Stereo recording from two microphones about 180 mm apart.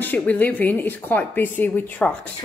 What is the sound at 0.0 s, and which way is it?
Speech, 10° left (ahead or behind).